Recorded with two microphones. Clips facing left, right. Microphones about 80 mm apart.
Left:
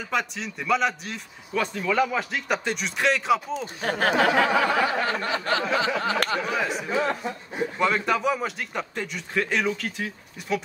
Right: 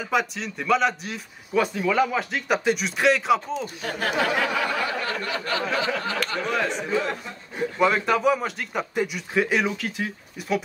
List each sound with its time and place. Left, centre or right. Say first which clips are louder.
0.0 s speech: right 3 dB; centre
3.8 s a sound: left 5 dB; left
6.4 s speech: right 1 dB; centre